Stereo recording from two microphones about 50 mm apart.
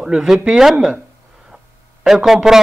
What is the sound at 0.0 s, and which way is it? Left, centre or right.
Speech, centre.